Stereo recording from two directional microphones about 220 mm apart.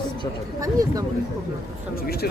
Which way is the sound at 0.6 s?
15° right (ahead or behind).